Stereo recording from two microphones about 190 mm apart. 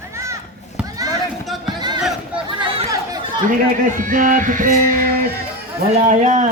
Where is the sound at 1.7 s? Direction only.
25° right (ahead or behind).